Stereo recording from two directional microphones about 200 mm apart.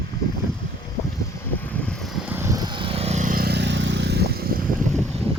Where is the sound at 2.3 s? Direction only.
15° right (ahead or behind); by 4.6 s 50° right (ahead or behind).